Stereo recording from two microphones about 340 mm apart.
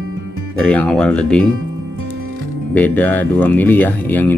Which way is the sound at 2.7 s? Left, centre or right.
Centre.